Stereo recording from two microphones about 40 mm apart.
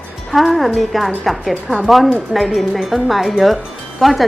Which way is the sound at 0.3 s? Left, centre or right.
Centre.